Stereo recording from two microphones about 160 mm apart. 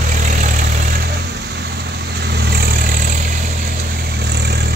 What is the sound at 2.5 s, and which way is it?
Vehicle, 70° right (ahead or behind).